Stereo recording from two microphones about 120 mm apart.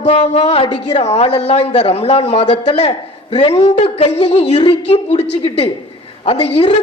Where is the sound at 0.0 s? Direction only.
60° left (ahead or behind).